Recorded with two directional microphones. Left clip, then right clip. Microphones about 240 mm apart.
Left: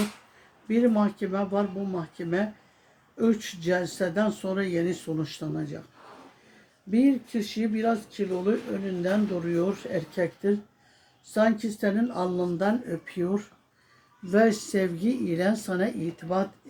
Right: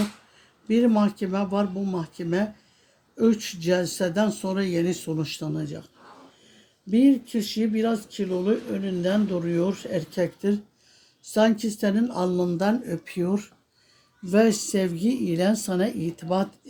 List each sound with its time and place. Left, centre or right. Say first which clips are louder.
0.7 s speech: right 2 dB; right
6.9 s speech: right 3 dB; right